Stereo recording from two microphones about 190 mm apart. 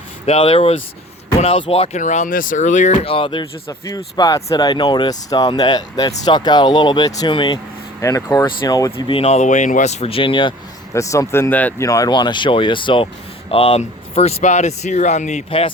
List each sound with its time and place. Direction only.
0.3 s speech: 30° left (ahead or behind)
10.9 s speech: 15° left (ahead or behind)